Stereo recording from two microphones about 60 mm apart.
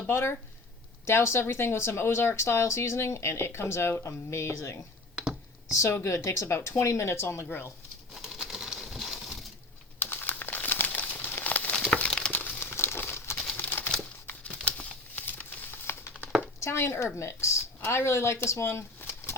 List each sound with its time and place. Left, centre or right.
0.1 s speech: left
5.1 s a sound: centre
5.7 s speech: left
8.1 s a sound: centre
10.0 s crumpling: left
11.4 s a sound: left
12.3 s crumpling: left
12.7 s crumpling: left
13.3 s clip-clop: left
14.4 s crumpling: left
15.3 s a sound: left
16.6 s speech: left